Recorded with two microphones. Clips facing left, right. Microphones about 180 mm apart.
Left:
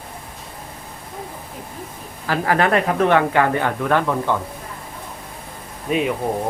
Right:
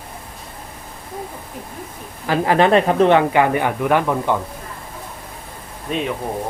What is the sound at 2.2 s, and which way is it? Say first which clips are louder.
Speech: right 3 dB; 20° right (ahead or behind).